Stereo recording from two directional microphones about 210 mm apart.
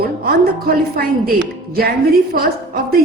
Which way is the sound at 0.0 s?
45° right (ahead or behind).